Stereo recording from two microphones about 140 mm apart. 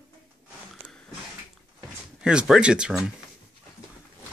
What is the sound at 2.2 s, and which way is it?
Speech, 5° right (ahead or behind).